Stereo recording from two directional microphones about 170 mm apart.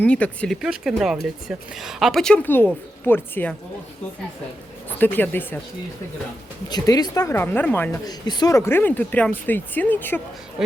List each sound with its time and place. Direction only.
0.0 s speech: 5° left (ahead or behind)
4.9 s speech: 10° left (ahead or behind)
6.7 s speech: 25° left (ahead or behind)
8.0 s speech: 25° left (ahead or behind)